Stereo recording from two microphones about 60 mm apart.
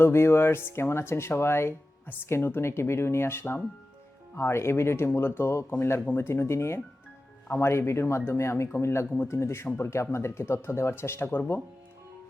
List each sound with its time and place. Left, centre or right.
0.0 s speech: left
5.7 s speech: left